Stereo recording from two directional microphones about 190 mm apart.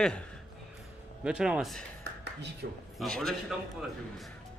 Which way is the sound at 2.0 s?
65° right (ahead or behind).